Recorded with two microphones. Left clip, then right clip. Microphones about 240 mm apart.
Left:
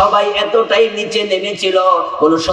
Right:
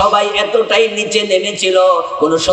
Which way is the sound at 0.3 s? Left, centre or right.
Right.